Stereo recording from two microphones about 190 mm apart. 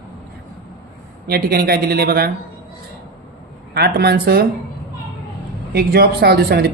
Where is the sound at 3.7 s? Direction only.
55° right (ahead or behind).